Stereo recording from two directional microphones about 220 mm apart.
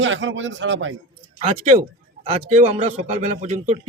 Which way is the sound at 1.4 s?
25° right (ahead or behind).